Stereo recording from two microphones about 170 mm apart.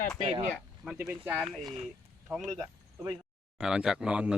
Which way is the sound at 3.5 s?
5° right (ahead or behind).